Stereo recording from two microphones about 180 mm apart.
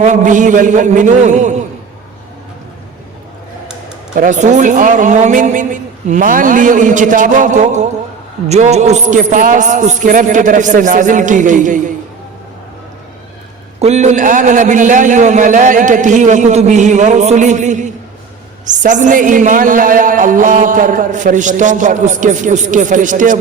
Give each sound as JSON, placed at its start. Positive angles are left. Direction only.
{"t": 0.0, "sound": "a woman's voice", "side_deg": -45}
{"t": 4.1, "sound": "a woman's voice", "side_deg": -45}
{"t": 13.7, "sound": "a woman's voice", "side_deg": -40}